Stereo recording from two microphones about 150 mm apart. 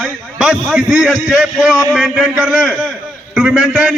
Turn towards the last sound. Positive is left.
turn(degrees=-5)  # may be behind; listen again after turning